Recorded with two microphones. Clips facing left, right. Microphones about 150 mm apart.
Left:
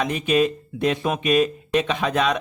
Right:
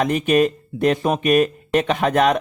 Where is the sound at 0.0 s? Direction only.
50° right (ahead or behind).